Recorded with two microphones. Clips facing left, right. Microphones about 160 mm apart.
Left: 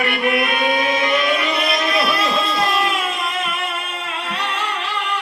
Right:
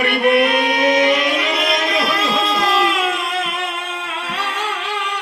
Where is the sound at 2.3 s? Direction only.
90° right.